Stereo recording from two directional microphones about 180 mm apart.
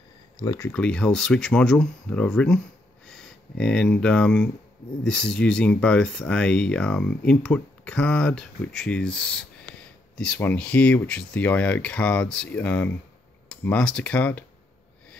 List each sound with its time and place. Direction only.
0.4 s speech: 20° left (ahead or behind)
0.7 s speech: 5° left (ahead or behind)